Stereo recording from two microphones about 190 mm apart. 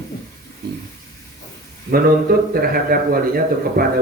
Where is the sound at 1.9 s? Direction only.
50° right (ahead or behind).